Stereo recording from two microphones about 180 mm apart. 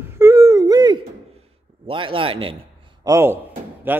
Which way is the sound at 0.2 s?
15° right (ahead or behind).